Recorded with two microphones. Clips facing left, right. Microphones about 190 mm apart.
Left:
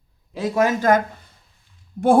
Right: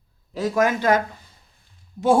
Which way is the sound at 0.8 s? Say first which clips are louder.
Left 2 dB; 50° left (ahead or behind).